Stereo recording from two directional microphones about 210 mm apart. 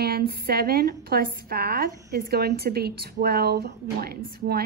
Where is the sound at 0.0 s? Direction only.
45° right (ahead or behind).